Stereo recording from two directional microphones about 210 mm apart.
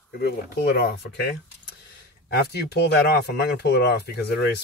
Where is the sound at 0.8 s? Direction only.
50° left (ahead or behind).